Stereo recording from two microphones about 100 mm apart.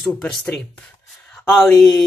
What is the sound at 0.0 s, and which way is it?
Speech, 10° left (ahead or behind).